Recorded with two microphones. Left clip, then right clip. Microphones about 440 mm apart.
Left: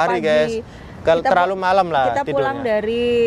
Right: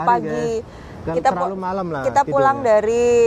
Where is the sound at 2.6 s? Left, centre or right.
Right.